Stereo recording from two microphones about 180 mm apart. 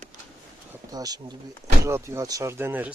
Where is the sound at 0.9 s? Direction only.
20° right (ahead or behind).